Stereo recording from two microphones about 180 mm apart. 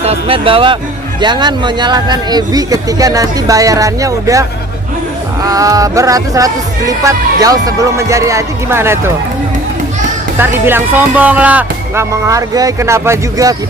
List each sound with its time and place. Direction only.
0.0 s speech: 35° right (ahead or behind); by 9.1 s 15° right (ahead or behind)
10.3 s speech: 10° right (ahead or behind)